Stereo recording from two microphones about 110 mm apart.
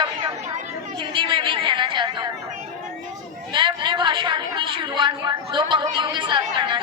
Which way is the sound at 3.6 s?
45° right (ahead or behind).